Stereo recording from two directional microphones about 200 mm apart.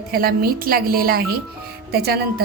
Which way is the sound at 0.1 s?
50° right (ahead or behind).